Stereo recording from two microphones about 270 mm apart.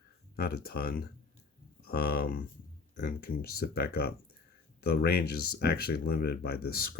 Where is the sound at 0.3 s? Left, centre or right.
Left.